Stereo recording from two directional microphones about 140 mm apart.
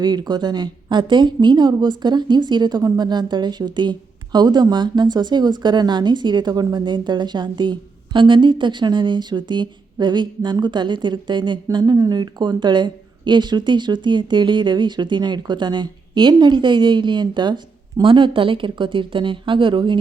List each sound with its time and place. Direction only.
0.0 s speech: 30° right (ahead or behind)